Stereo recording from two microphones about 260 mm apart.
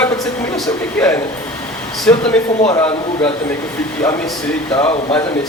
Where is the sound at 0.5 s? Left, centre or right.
Centre.